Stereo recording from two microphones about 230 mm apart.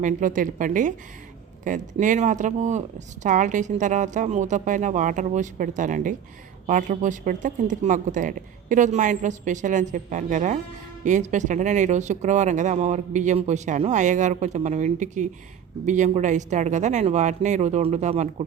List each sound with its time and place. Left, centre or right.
0.0 s speech: right